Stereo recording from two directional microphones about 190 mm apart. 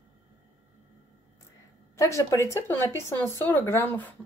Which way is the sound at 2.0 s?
15° left (ahead or behind).